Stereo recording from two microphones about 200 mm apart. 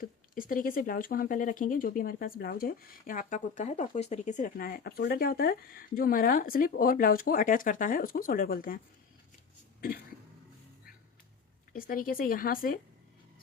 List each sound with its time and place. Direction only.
0.0 s speech: 45° left (ahead or behind)
11.7 s speech: 45° left (ahead or behind)